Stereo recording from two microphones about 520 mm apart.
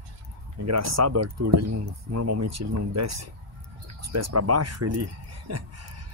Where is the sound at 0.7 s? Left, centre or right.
Right.